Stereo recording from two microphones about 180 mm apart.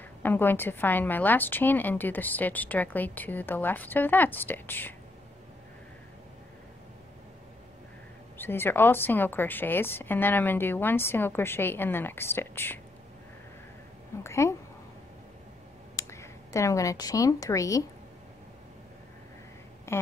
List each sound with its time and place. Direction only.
0.2 s a woman's voice: 10° left (ahead or behind)
8.4 s a woman's voice: 10° left (ahead or behind)
14.2 s a woman's voice: 15° left (ahead or behind)
16.0 s speech: 15° left (ahead or behind)
19.9 s speech: 15° left (ahead or behind)